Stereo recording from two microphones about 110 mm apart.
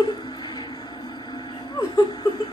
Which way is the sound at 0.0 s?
45° left (ahead or behind).